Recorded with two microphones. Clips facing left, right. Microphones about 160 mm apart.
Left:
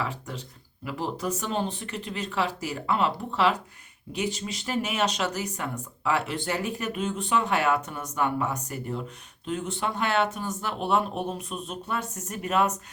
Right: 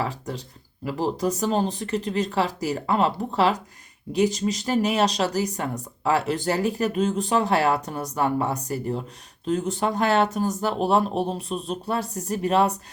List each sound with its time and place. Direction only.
0.0 s speech: 35° right (ahead or behind)